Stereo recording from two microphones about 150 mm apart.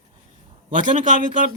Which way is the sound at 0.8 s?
60° right (ahead or behind).